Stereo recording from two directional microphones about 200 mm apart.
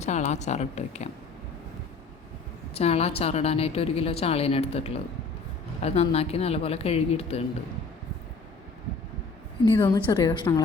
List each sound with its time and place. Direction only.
0.0 s a woman's voice: 35° left (ahead or behind)
2.7 s a woman's voice: 30° left (ahead or behind)
9.8 s a woman's voice: 20° left (ahead or behind)